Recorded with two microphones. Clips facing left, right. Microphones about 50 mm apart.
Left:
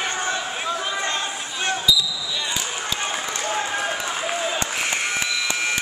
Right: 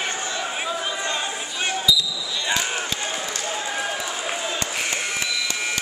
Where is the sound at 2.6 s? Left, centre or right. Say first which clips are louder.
Right 1 dB; right.